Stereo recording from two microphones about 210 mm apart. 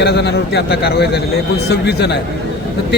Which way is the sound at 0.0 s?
55° left (ahead or behind).